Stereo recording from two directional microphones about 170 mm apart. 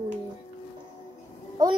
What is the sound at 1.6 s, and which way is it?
Speech, 20° right (ahead or behind).